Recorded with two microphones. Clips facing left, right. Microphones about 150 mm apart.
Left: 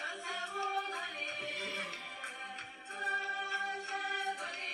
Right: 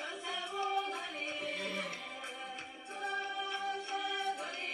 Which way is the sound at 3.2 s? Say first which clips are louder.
Right 2 dB; 20° right (ahead or behind).